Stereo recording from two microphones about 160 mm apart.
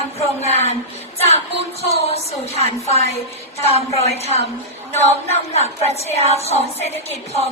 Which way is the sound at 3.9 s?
40° left (ahead or behind).